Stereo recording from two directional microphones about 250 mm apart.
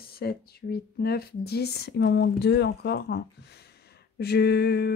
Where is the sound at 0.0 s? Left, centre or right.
Left.